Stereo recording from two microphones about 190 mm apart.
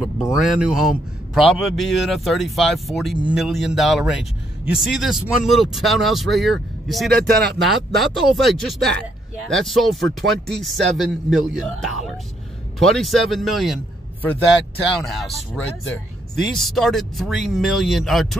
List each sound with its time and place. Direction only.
0.0 s a man's voice: 5° right (ahead or behind)
15.0 s a man's voice: centre (ahead or behind)